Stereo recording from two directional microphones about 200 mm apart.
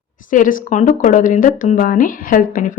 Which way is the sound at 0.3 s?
40° left (ahead or behind).